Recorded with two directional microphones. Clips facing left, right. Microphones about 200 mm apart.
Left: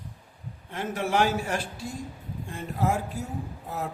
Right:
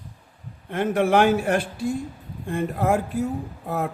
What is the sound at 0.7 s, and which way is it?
A man's voice, 60° right (ahead or behind).